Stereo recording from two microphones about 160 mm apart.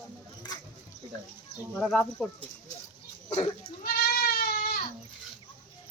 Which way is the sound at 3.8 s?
75° left (ahead or behind).